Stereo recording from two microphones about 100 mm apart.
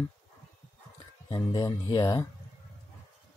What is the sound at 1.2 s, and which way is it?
Speech, 35° left (ahead or behind).